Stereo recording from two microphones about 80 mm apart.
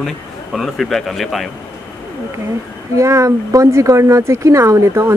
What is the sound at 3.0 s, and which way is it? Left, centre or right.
Speech, right.